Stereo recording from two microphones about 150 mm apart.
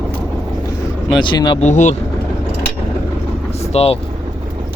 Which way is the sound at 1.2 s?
30° left (ahead or behind).